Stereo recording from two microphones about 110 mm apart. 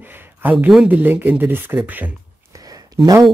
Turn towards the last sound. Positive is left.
turn(degrees=-30)  # may be behind; listen again after turning